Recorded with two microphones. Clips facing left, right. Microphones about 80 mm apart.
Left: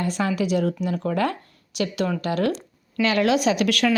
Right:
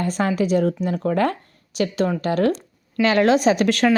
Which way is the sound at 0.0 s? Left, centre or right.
Right.